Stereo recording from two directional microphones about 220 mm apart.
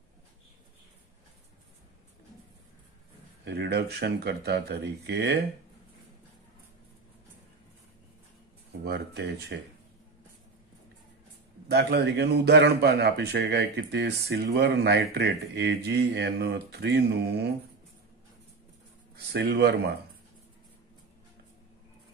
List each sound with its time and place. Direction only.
3.4 s a man's voice: 50° right (ahead or behind)
8.8 s a man's voice: 50° right (ahead or behind)
11.7 s a man's voice: 50° right (ahead or behind)
19.1 s a man's voice: 50° right (ahead or behind)